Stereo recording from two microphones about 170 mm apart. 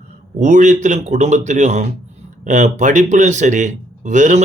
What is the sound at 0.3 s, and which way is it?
A man's voice, 50° right (ahead or behind).